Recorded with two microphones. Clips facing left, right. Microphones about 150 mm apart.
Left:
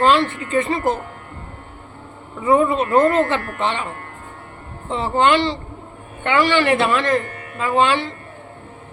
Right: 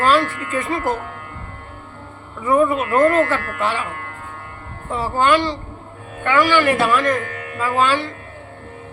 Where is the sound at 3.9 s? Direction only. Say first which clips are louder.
Right 1 dB; 90° right.